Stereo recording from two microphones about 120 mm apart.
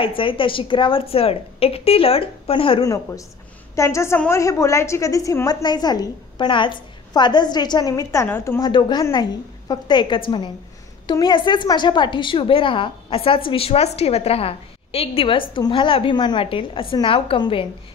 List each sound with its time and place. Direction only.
0.0 s a woman's voice: 45° left (ahead or behind)
2.8 s a woman's voice: 25° left (ahead or behind)
8.6 s a woman's voice: 40° left (ahead or behind)